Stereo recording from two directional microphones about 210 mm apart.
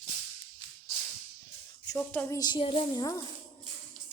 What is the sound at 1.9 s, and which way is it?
A woman's voice, 10° left (ahead or behind).